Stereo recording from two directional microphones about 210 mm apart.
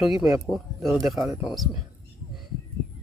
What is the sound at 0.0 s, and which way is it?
Speech, centre (ahead or behind).